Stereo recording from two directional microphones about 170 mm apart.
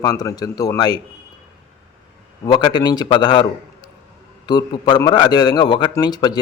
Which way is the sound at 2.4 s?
25° left (ahead or behind).